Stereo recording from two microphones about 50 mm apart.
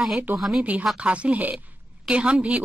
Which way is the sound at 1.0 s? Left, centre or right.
Right.